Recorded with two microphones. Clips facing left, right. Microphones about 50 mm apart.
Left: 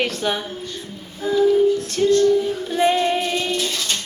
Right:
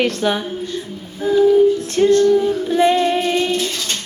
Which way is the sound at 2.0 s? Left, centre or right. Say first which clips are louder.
Right 4 dB; right.